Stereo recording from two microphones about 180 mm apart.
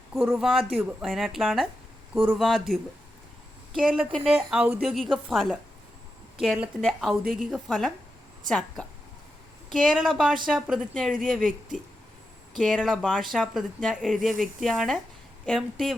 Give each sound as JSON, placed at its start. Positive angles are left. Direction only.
{"t": 0.1, "sound": "speech", "side_deg": 0}
{"t": 4.5, "sound": "speech", "side_deg": -5}